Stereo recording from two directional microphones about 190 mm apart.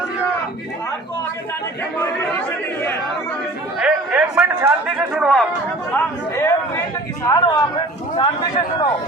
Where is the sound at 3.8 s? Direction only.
5° right (ahead or behind).